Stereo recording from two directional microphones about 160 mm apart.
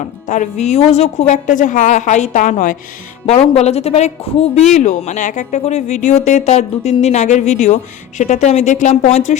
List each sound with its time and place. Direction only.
0.3 s speech: 50° left (ahead or behind)
3.5 s speech: 40° left (ahead or behind)